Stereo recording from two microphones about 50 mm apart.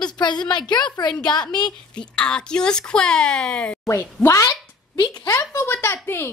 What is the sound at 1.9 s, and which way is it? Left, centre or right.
Speech, centre.